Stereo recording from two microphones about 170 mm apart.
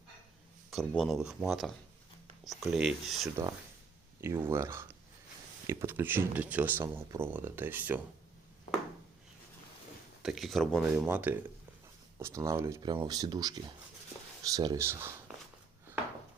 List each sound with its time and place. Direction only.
0.7 s speech: centre (ahead or behind)
4.2 s speech: 15° right (ahead or behind)
10.2 s speech: centre (ahead or behind)
10.9 s speech: 10° right (ahead or behind)